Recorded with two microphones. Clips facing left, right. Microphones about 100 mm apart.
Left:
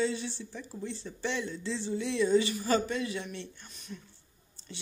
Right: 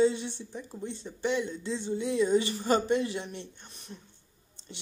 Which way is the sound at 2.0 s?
35° right (ahead or behind).